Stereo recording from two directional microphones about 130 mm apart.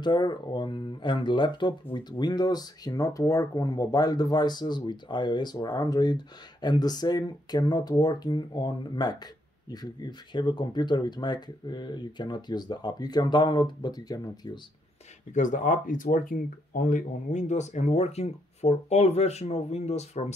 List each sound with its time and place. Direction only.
0.0 s speech: 35° left (ahead or behind)
15.3 s speech: 75° left (ahead or behind); by 20.3 s 60° left (ahead or behind)